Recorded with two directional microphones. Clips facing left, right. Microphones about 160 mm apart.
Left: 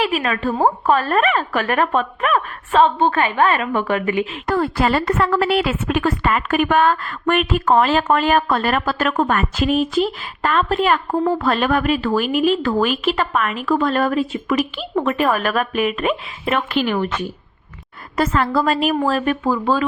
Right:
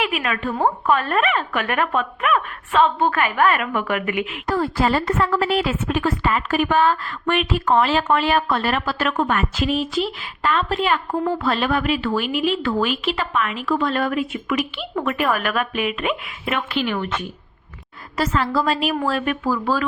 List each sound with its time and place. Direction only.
0.0 s a woman's voice: 35° left (ahead or behind)
4.4 s a woman's voice: 65° left (ahead or behind); by 17.2 s 40° left (ahead or behind)
18.2 s a woman's voice: 55° left (ahead or behind); by 19.4 s 35° left (ahead or behind)
19.5 s speech: 20° left (ahead or behind)